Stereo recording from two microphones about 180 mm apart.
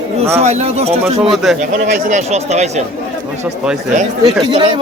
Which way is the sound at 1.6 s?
45° right (ahead or behind).